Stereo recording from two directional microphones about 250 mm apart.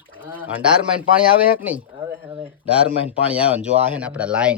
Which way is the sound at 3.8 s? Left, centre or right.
Centre.